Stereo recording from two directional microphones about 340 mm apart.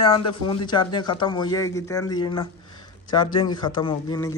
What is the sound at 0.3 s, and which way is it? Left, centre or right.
Speech, centre.